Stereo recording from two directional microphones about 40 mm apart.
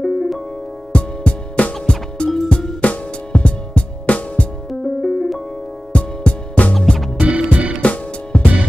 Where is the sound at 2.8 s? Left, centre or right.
Left.